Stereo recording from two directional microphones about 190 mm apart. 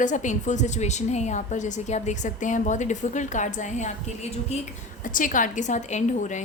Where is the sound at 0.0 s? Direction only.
40° left (ahead or behind).